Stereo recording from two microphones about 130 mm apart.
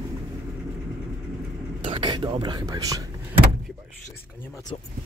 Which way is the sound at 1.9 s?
35° right (ahead or behind).